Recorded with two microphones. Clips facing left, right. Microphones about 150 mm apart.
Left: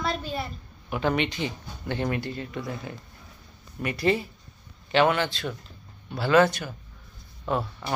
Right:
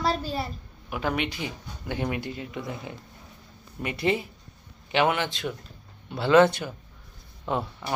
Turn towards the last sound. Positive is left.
turn(degrees=-20)  # may be behind; listen again after turning